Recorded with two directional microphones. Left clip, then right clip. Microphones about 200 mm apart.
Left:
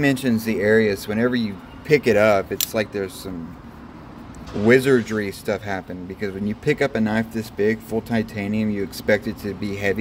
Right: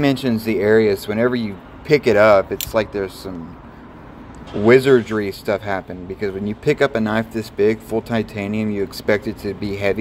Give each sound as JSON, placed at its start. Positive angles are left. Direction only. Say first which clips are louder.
{"t": 0.0, "sound": "speech", "louder": "right 2 dB", "side_deg": 0}
{"t": 4.6, "sound": "speech", "louder": "right 4 dB", "side_deg": 0}